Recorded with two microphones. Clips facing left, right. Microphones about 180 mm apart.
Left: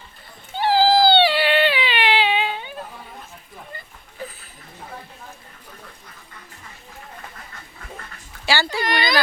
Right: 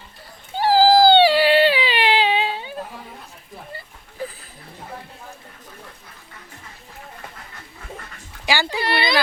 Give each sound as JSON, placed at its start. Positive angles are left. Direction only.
{"t": 0.5, "sound": "baby cry", "side_deg": -40}
{"t": 8.4, "sound": "speech", "side_deg": -15}
{"t": 8.8, "sound": "a sound", "side_deg": -30}